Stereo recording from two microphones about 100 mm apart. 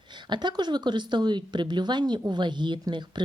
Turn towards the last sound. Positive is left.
turn(degrees=-50)  # may be behind; listen again after turning